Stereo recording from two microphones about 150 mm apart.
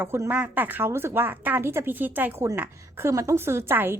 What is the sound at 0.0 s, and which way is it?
A woman's voice, 15° right (ahead or behind).